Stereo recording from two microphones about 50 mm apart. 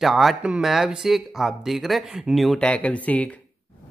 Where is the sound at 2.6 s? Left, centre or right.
Left.